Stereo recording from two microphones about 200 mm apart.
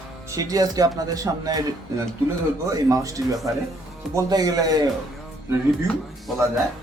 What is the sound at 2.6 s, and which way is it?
Speech, 15° right (ahead or behind).